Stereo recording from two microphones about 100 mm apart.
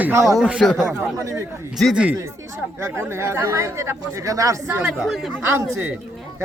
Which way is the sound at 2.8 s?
25° right (ahead or behind).